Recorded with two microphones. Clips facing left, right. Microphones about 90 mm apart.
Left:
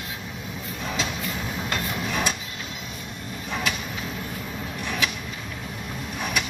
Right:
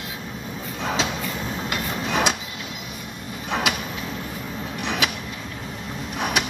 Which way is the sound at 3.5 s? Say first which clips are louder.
Right 4 dB; 70° right (ahead or behind).